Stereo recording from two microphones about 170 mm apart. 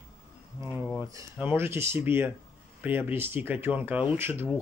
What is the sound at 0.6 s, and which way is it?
Speech, 15° right (ahead or behind).